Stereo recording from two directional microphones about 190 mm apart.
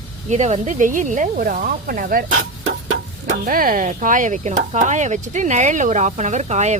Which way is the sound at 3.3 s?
45° right (ahead or behind).